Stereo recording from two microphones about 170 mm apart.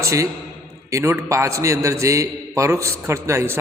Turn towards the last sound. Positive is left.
turn(degrees=-15)  # may be behind; listen again after turning